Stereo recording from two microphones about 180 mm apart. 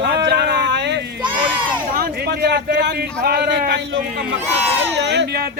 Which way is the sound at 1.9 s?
60° right (ahead or behind).